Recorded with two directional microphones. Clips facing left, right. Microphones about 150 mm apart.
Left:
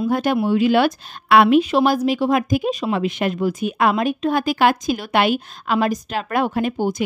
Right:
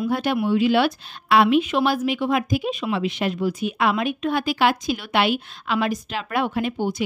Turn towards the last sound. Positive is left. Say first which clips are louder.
# left 3 dB
turn(degrees=45)  # may be behind; listen again after turning